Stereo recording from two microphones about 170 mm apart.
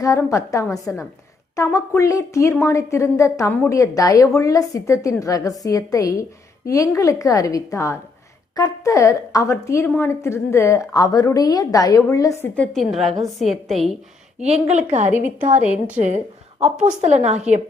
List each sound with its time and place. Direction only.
0.0 s a woman's voice: 20° left (ahead or behind)
12.7 s a woman's voice: centre (ahead or behind)
14.3 s a woman's voice: 40° right (ahead or behind)